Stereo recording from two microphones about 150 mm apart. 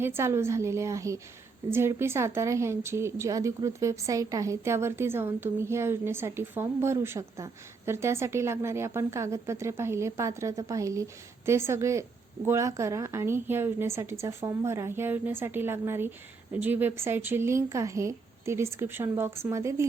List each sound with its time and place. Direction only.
0.0 s a woman's voice: 15° right (ahead or behind)